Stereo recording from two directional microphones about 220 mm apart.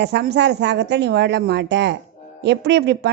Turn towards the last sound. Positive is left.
turn(degrees=-50)  # may be behind; listen again after turning